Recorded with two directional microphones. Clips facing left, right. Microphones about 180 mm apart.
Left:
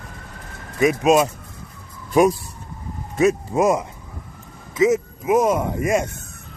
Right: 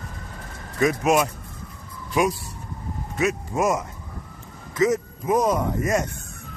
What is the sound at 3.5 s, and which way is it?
Speech, 15° left (ahead or behind).